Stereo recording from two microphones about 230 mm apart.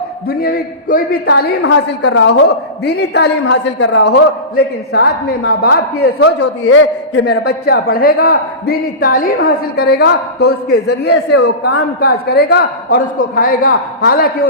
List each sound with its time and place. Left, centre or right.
0.3 s a man's voice: left
6.7 s a man's voice: left
7.4 s a man's voice: left